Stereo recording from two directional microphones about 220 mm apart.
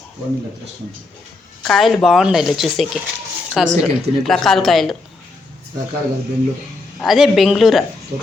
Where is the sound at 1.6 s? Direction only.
Centre (ahead or behind).